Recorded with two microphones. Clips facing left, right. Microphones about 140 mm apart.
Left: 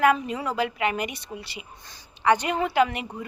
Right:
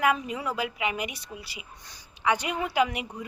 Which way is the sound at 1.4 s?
70° left (ahead or behind).